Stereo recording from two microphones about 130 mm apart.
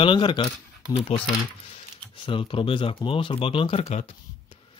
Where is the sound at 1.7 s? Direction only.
40° left (ahead or behind).